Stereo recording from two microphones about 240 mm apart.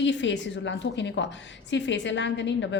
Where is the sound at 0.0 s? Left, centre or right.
Left.